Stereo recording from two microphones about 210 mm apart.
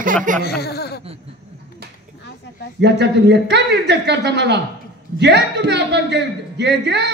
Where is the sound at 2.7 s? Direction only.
55° right (ahead or behind).